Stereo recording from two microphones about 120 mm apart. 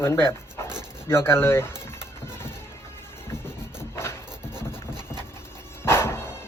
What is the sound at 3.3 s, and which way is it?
Music, 20° left (ahead or behind).